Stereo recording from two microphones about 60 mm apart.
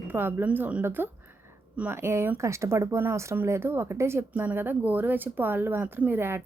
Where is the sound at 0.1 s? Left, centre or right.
Right.